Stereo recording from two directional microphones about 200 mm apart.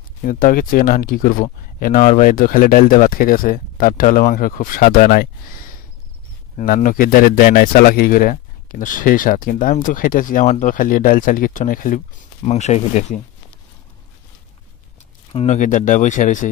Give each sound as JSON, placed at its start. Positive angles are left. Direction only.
{"t": 0.2, "sound": "speech", "side_deg": 45}
{"t": 6.6, "sound": "speech", "side_deg": 45}
{"t": 15.3, "sound": "speech", "side_deg": 35}